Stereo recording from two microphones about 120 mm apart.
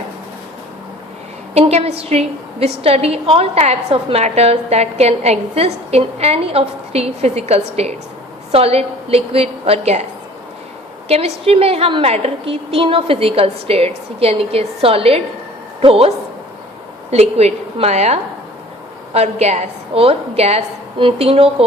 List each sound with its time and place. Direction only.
1.5 s a woman's voice: 55° right (ahead or behind)
11.1 s a woman's voice: 55° right (ahead or behind)